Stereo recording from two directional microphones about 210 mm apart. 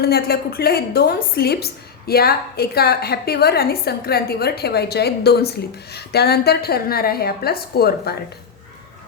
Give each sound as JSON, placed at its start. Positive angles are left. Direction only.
{"t": 0.0, "sound": "a woman's voice", "side_deg": 50}